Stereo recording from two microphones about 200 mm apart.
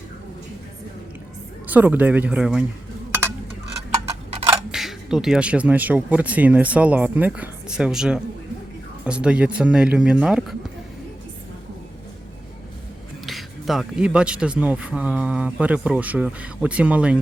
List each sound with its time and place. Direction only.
1.6 s speech: 10° right (ahead or behind)
4.0 s tick-tock: 30° right (ahead or behind)
4.7 s speech: centre (ahead or behind)
13.2 s speech: centre (ahead or behind)